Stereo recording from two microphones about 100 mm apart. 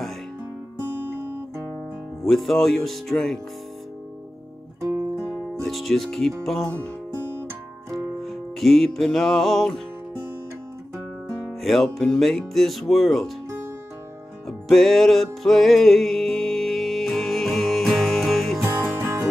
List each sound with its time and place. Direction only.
0.7 s guitar: 25° right (ahead or behind)
2.2 s speech: centre (ahead or behind)
5.3 s music: centre (ahead or behind)
6.4 s speech: centre (ahead or behind)
7.9 s music: centre (ahead or behind)
11.6 s speech: centre (ahead or behind)
14.7 s music: centre (ahead or behind)
18.6 s music: 25° right (ahead or behind)